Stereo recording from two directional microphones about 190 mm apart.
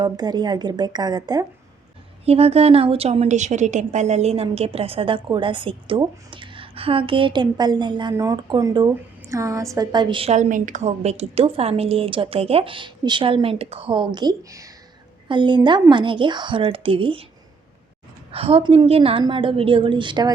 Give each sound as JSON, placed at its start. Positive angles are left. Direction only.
{"t": 0.0, "sound": "a woman's voice", "side_deg": -20}
{"t": 2.2, "sound": "a woman's voice", "side_deg": -30}
{"t": 18.3, "sound": "a woman's voice", "side_deg": -30}